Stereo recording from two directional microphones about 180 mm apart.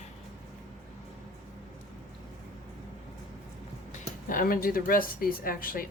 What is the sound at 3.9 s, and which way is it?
Speech, 50° left (ahead or behind).